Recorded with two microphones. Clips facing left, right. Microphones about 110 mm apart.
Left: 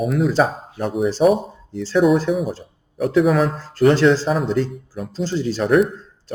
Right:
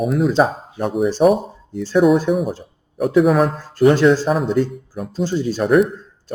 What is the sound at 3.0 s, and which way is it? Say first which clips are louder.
Speech: right 2 dB; centre (ahead or behind).